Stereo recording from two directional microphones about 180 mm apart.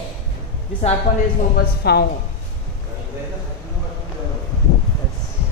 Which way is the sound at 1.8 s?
65° left (ahead or behind).